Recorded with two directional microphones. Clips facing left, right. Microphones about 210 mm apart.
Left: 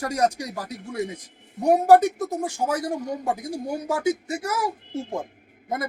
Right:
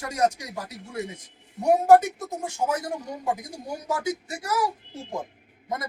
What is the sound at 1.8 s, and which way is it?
Speech, 35° left (ahead or behind).